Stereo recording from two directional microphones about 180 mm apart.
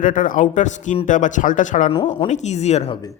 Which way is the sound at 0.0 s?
50° left (ahead or behind).